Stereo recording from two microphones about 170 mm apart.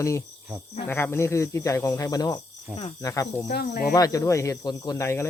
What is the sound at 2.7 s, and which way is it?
Speech, 10° right (ahead or behind).